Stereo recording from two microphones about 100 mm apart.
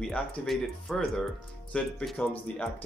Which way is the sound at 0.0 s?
5° left (ahead or behind).